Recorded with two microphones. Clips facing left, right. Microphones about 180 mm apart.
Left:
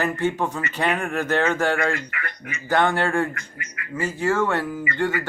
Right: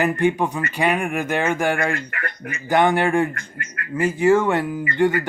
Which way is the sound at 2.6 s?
15° right (ahead or behind).